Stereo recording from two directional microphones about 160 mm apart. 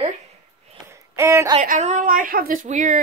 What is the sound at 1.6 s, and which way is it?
A woman's voice, 50° right (ahead or behind).